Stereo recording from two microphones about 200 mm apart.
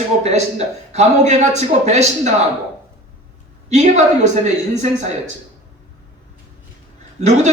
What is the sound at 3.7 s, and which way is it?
Speech, 35° right (ahead or behind).